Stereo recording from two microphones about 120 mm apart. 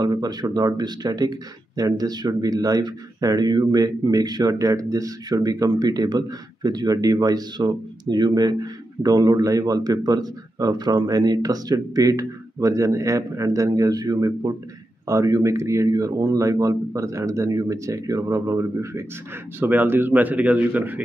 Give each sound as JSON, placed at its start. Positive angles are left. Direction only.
{"t": 0.0, "sound": "speech", "side_deg": -35}